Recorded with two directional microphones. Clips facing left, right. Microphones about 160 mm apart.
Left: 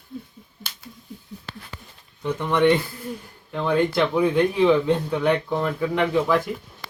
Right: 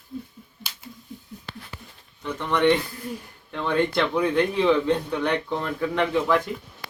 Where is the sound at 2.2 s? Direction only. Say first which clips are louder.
Left 2 dB; 10° left (ahead or behind).